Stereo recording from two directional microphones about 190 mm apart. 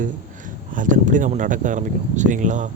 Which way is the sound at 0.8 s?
40° right (ahead or behind).